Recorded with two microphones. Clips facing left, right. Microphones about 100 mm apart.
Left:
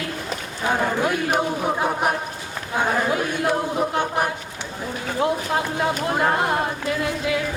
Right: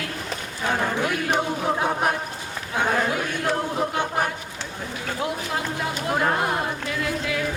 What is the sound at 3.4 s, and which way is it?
Chant, 10° left (ahead or behind).